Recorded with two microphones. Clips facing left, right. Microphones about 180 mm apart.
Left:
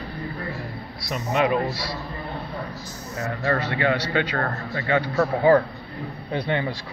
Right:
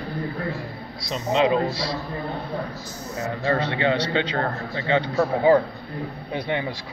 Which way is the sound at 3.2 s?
20° right (ahead or behind).